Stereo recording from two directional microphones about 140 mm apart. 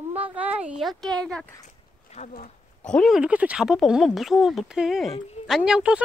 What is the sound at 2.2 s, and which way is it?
Speech, 55° left (ahead or behind).